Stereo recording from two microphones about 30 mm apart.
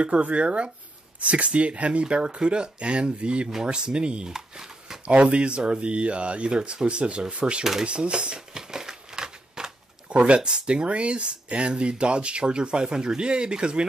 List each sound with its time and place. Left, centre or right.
0.0 s speech: right
4.3 s a sound: centre
5.0 s speech: right
7.8 s crumpling: right
10.0 s speech: right